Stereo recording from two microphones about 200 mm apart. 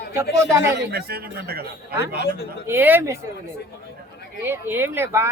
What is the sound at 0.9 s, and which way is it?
Speech, 50° right (ahead or behind).